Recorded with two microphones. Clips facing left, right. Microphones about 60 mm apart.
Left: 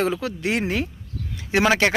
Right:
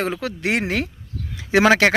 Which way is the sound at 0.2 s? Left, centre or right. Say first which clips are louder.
Right 2 dB; right.